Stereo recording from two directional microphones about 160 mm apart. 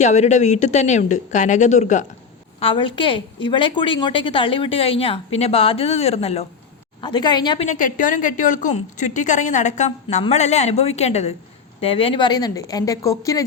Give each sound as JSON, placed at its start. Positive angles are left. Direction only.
{"t": 0.0, "sound": "a woman's voice", "side_deg": 45}
{"t": 2.6, "sound": "a woman's voice", "side_deg": 35}
{"t": 7.0, "sound": "speech", "side_deg": 30}
{"t": 7.6, "sound": "a woman's voice", "side_deg": 50}